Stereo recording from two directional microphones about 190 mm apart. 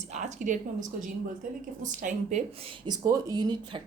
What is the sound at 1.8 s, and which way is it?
Speech, 40° right (ahead or behind).